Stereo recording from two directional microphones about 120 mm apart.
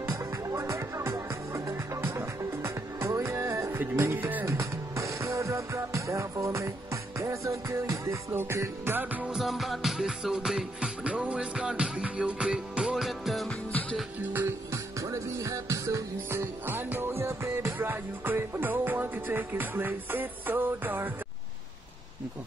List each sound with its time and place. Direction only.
0.0 s music: 25° right (ahead or behind); by 13.6 s centre (ahead or behind)
13.7 s music: 15° left (ahead or behind)
14.3 s music: 20° right (ahead or behind)